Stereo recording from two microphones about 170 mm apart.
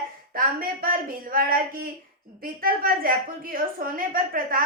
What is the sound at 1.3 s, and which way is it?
A woman's voice, 60° right (ahead or behind).